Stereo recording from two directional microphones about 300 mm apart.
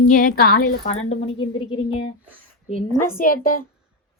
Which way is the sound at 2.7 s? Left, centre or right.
Left.